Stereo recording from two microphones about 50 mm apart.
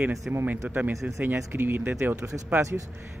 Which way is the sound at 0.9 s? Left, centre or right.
Right.